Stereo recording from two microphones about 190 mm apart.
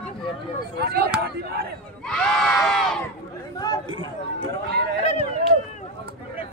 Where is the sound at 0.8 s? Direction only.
55° right (ahead or behind).